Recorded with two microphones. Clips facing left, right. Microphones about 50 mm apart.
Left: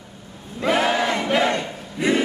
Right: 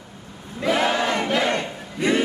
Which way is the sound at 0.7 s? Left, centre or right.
Centre.